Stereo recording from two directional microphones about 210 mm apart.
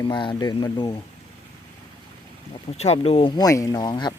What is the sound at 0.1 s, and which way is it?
Speech, 20° left (ahead or behind).